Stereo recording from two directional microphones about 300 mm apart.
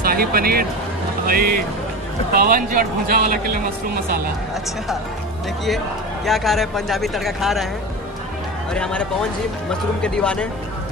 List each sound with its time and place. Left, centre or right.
0.0 s speech: right
6.2 s speech: centre
8.7 s speech: centre